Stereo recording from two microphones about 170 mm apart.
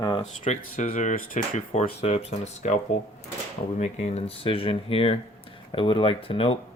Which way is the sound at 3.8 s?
40° left (ahead or behind).